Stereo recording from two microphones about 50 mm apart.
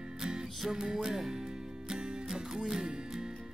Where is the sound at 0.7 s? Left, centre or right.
Centre.